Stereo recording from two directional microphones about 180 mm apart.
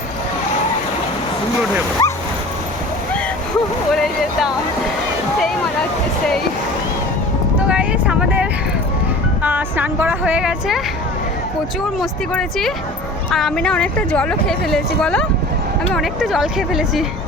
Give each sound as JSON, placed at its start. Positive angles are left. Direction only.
{"t": 2.0, "sound": "bow-wow", "side_deg": 20}
{"t": 3.9, "sound": "a sound", "side_deg": 0}
{"t": 7.7, "sound": "vehicle", "side_deg": -5}
{"t": 9.4, "sound": "speech", "side_deg": -10}
{"t": 12.3, "sound": "a woman's voice", "side_deg": 5}